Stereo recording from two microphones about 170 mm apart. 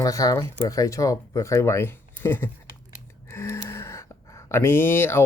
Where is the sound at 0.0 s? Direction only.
20° left (ahead or behind).